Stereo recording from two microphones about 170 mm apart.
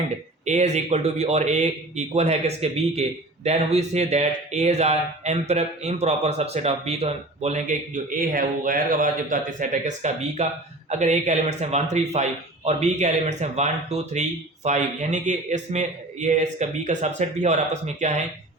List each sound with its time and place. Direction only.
0.4 s a man's voice: 45° right (ahead or behind)